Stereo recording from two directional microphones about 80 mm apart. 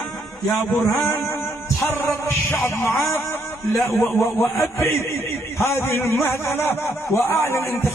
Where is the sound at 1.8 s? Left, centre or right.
Left.